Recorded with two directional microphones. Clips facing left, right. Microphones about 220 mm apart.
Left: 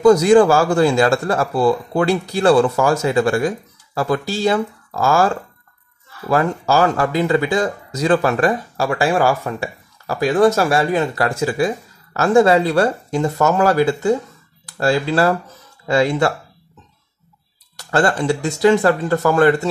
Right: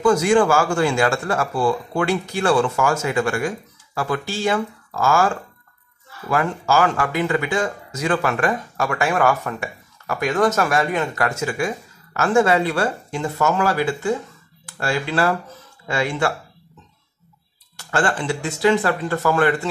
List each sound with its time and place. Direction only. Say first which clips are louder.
0.0 s speech: left 6 dB; 40° left (ahead or behind)
17.7 s speech: left 4 dB; 40° left (ahead or behind)